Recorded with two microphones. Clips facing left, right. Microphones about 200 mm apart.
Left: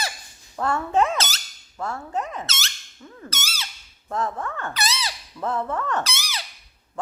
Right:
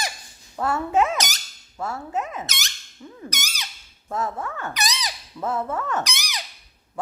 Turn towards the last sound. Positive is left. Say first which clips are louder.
# even
turn(degrees=-15)  # may be behind; listen again after turning